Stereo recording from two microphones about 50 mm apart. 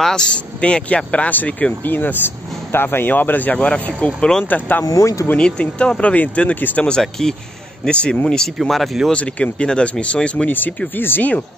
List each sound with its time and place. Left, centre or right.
0.0 s speech: centre; by 3.5 s left
3.5 s speech: left
4.5 s speech: left
4.9 s speech: left
5.4 s speech: centre; by 6.8 s left
7.0 s speech: centre
7.9 s speech: left
8.5 s speech: centre
9.1 s speech: left
11.0 s speech: left